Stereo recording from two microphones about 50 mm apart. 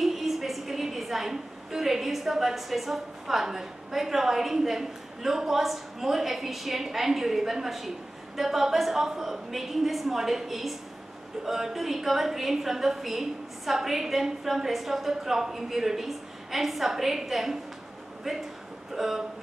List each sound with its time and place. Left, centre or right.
0.0 s a woman's voice: centre
18.9 s speech: centre